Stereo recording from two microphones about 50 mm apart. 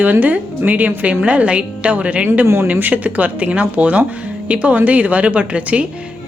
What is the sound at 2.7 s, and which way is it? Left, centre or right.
A woman's voice, right.